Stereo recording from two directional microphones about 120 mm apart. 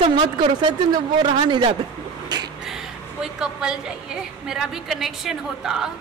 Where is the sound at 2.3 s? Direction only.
35° right (ahead or behind).